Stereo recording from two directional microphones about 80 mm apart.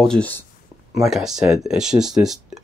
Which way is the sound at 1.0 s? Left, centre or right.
Centre.